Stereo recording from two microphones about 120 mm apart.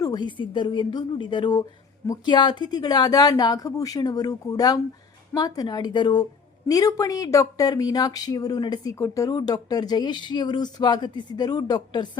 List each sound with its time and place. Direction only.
0.0 s speech: 35° left (ahead or behind)